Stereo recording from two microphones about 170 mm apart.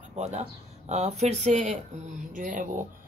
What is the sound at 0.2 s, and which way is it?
Speech, 40° right (ahead or behind).